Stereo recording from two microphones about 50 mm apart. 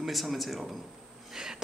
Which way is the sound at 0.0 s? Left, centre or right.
Centre.